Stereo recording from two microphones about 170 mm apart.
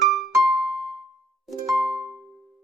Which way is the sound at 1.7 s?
Centre (ahead or behind).